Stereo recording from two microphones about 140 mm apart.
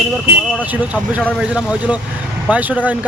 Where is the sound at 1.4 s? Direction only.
5° right (ahead or behind).